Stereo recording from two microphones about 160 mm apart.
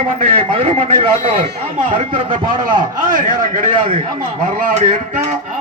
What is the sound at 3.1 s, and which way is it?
A man's voice, 60° right (ahead or behind).